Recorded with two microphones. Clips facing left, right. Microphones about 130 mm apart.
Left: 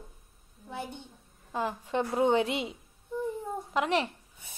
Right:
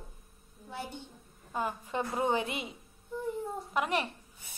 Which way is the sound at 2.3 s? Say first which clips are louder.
Left 6 dB; 90° left.